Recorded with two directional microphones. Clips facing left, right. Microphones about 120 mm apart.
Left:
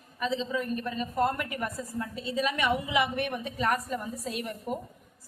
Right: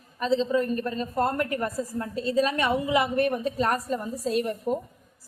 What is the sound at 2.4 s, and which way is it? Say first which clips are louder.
A woman's voice: right 3 dB; 35° right (ahead or behind).